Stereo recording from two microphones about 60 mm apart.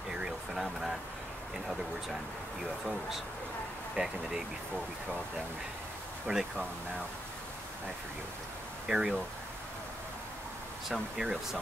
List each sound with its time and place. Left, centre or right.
0.2 s a sound: centre
3.9 s speech: centre
6.3 s speech: right
8.8 s speech: centre
10.9 s speech: centre